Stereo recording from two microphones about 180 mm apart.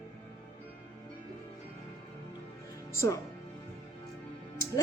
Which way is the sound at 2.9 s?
15° left (ahead or behind).